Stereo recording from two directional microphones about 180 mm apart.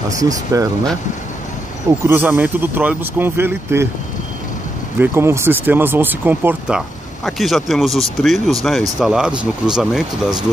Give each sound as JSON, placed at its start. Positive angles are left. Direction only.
{"t": 0.5, "sound": "speech", "side_deg": -20}
{"t": 1.9, "sound": "speech", "side_deg": -10}
{"t": 4.9, "sound": "speech", "side_deg": -10}
{"t": 7.2, "sound": "speech", "side_deg": 0}